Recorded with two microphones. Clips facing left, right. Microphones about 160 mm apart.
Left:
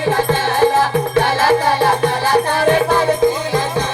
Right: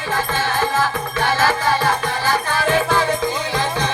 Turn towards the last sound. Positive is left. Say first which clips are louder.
# left 4 dB
turn(degrees=55)  # may be behind; listen again after turning